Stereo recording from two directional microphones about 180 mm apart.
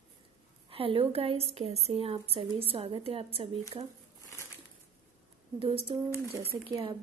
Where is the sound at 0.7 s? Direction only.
30° right (ahead or behind).